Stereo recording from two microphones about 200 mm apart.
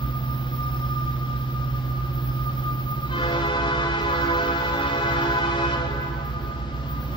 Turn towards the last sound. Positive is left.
turn(degrees=25)  # may be behind; listen again after turning